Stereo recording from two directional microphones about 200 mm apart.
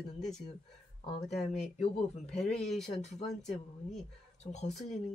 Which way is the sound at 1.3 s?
Centre (ahead or behind).